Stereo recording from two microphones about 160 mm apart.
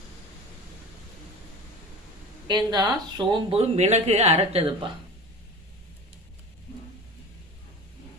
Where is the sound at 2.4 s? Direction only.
25° right (ahead or behind).